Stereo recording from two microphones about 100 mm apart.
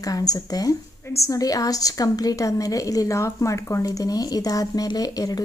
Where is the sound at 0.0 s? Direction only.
35° left (ahead or behind).